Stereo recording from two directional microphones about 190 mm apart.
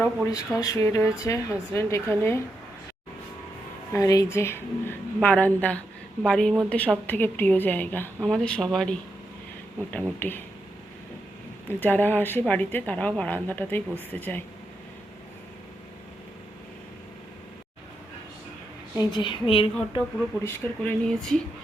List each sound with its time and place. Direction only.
0.0 s a woman's voice: 15° left (ahead or behind)
3.9 s a woman's voice: 20° left (ahead or behind)
10.2 s a woman's voice: 10° left (ahead or behind)
11.7 s a woman's voice: 10° left (ahead or behind)
18.9 s a woman's voice: 25° left (ahead or behind)
20.4 s a woman's voice: 10° left (ahead or behind)